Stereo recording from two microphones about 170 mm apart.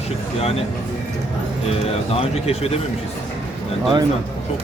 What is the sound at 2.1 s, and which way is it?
Speech, 35° left (ahead or behind).